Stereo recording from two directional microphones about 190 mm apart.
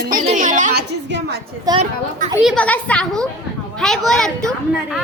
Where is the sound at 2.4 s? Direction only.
5° left (ahead or behind).